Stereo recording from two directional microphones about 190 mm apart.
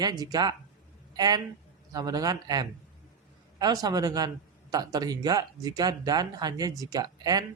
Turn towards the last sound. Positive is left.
turn(degrees=-20)  # may be behind; listen again after turning